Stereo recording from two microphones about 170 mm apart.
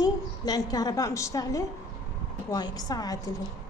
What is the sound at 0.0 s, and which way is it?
A woman's voice, 20° left (ahead or behind).